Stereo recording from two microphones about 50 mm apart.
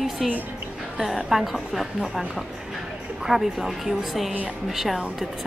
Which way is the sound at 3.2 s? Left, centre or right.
Centre.